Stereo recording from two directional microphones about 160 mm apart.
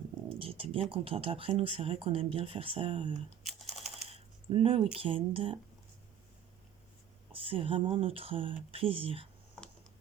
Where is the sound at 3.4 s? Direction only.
Centre (ahead or behind).